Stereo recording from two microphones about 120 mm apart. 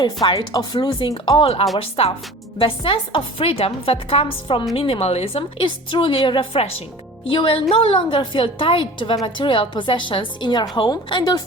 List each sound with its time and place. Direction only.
0.0 s a woman's voice: 35° left (ahead or behind)